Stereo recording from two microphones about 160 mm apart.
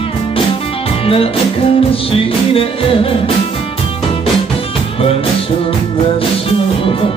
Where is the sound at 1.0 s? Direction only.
35° left (ahead or behind).